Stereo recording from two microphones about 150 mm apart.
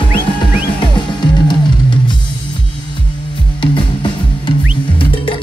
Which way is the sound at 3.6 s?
35° left (ahead or behind).